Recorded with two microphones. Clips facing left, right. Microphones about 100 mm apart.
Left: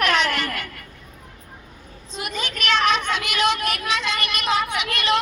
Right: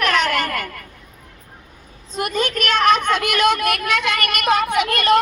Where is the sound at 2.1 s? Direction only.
50° right (ahead or behind).